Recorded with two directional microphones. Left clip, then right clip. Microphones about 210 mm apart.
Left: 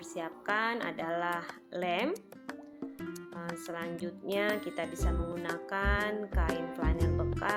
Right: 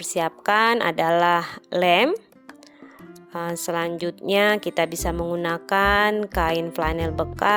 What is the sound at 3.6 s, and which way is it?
A woman's voice, 50° right (ahead or behind).